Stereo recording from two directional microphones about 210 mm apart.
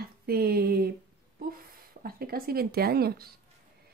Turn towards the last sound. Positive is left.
turn(degrees=-45)  # may be behind; listen again after turning